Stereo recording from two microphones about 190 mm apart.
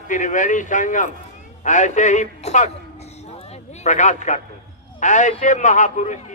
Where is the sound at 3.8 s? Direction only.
40° left (ahead or behind).